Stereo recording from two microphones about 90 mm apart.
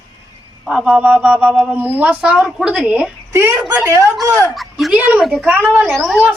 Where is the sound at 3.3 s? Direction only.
30° right (ahead or behind).